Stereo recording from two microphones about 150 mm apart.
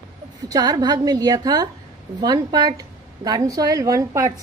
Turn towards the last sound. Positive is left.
turn(degrees=-25)  # may be behind; listen again after turning